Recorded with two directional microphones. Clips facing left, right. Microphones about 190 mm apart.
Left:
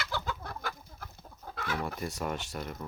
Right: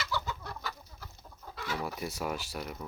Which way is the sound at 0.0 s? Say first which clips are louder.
Even; 55° left (ahead or behind).